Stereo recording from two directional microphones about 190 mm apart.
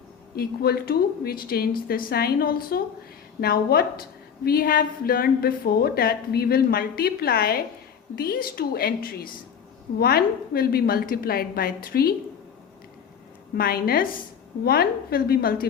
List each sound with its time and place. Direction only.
0.3 s a woman's voice: 55° left (ahead or behind)
13.6 s a woman's voice: 50° left (ahead or behind)